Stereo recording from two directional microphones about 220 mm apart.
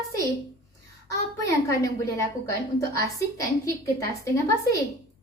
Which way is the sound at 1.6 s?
15° left (ahead or behind).